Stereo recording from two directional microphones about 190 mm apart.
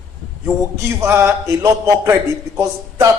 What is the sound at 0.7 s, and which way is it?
A man's voice, 15° right (ahead or behind).